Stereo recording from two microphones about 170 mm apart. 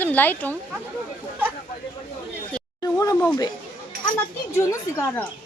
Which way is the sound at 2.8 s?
20° left (ahead or behind).